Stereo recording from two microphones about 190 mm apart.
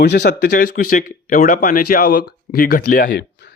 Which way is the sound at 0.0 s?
60° left (ahead or behind).